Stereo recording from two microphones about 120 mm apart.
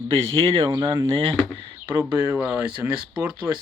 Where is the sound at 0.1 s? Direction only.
55° right (ahead or behind).